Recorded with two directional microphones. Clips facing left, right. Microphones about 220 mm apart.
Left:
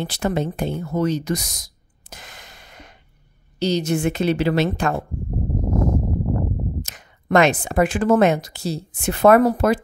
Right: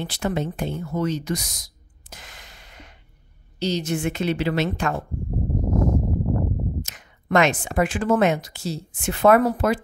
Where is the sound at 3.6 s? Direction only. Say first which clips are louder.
Left 4 dB; 40° left (ahead or behind).